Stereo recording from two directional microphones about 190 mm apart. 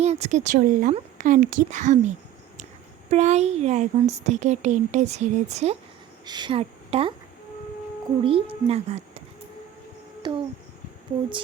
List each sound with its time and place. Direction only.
0.0 s speech: 35° right (ahead or behind)
6.2 s a woman's voice: 25° right (ahead or behind)
8.2 s a woman's voice: 30° right (ahead or behind)
10.2 s a sound: 25° right (ahead or behind)